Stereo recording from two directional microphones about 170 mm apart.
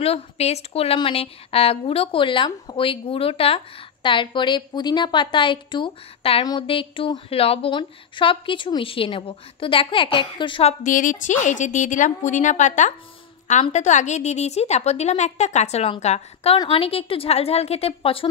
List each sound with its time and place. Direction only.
0.0 s a woman's voice: 35° left (ahead or behind)